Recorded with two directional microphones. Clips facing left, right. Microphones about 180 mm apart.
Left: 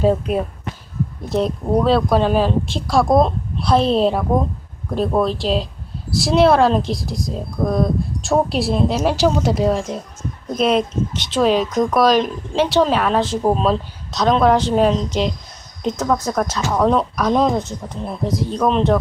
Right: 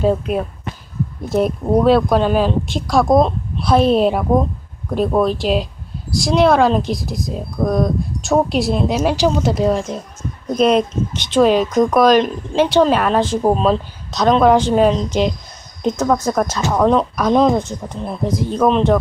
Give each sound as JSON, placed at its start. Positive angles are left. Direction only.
{"t": 1.3, "sound": "speech", "side_deg": -5}